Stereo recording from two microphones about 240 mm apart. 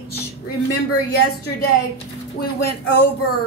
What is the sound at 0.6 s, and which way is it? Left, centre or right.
Speech, left.